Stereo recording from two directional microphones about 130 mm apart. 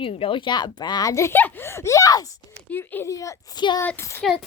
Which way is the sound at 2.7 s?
15° left (ahead or behind).